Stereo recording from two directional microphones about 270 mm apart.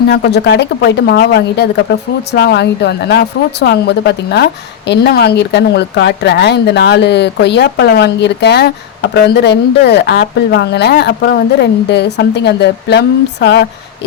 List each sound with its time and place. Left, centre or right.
0.1 s a woman's voice: left